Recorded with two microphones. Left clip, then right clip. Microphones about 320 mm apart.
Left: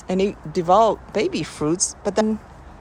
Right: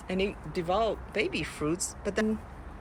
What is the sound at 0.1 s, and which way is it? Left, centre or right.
Speech, centre.